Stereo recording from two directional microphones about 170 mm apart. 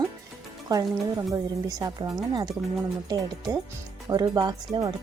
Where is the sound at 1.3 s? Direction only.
20° right (ahead or behind).